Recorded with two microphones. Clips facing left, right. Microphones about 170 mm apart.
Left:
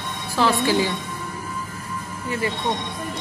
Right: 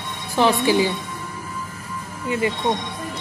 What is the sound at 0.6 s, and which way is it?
Speech, 15° right (ahead or behind).